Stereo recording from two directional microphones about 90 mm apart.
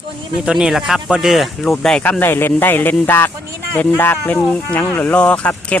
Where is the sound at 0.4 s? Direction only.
5° right (ahead or behind).